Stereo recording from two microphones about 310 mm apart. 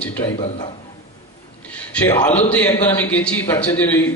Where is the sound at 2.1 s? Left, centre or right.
Centre.